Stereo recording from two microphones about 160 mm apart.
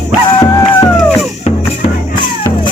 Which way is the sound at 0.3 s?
25° left (ahead or behind).